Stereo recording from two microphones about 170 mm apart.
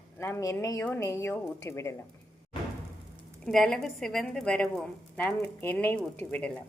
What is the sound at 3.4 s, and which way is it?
A woman's voice, 5° left (ahead or behind).